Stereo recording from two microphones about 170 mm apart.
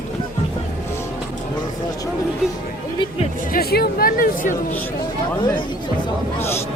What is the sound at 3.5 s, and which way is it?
Speech, 65° left (ahead or behind).